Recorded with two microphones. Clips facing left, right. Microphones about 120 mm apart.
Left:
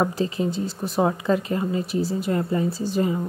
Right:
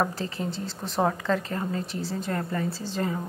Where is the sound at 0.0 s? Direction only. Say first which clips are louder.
Left 5 dB; 15° left (ahead or behind).